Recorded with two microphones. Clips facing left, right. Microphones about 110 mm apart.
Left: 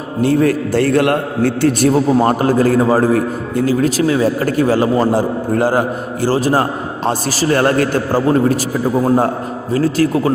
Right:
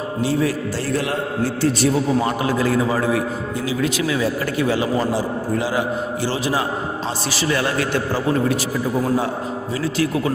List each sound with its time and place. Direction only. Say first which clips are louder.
0.2 s a man's voice: left 8 dB; 55° left (ahead or behind)